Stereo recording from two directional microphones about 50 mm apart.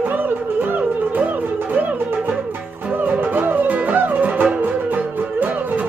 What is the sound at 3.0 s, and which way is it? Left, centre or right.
Music, right.